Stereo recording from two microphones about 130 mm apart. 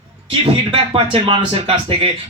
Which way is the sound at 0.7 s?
45° right (ahead or behind).